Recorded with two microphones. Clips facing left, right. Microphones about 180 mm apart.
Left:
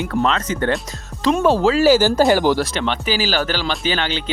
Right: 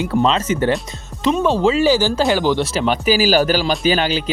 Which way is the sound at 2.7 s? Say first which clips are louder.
Right 5 dB; 5° right (ahead or behind).